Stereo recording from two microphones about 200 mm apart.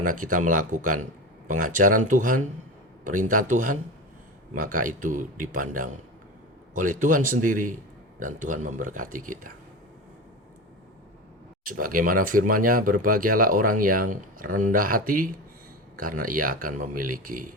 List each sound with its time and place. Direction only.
0.2 s speech: 40° right (ahead or behind)
11.6 s speech: 45° right (ahead or behind)